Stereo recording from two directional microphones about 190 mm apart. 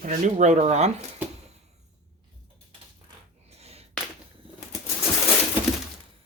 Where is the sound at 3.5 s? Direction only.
35° right (ahead or behind).